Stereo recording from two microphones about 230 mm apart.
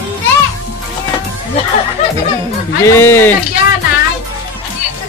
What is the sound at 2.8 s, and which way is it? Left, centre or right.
Speech, centre.